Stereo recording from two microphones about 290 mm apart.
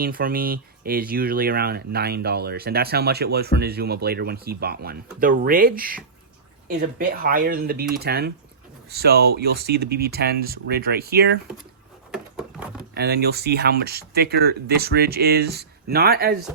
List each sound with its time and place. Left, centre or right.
0.0 s speech: right
12.1 s a sound: centre
12.9 s speech: right